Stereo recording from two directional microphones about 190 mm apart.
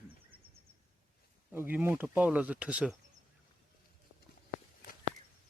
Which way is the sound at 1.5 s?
10° right (ahead or behind).